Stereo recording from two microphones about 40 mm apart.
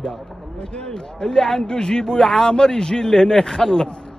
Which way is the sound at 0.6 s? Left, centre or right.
Centre.